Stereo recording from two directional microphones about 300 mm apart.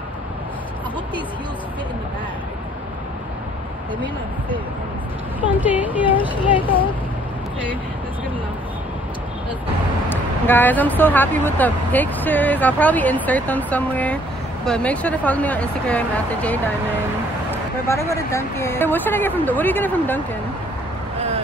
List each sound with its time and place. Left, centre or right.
5.4 s speech: centre
6.0 s speech: centre
10.0 s speech: centre